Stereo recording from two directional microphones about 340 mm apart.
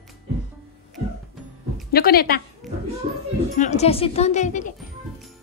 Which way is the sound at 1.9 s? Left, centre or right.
Left.